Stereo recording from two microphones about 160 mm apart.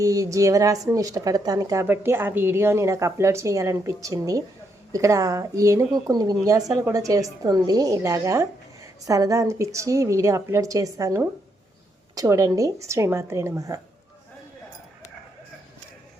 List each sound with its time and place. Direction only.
0.0 s a woman's voice: 20° right (ahead or behind)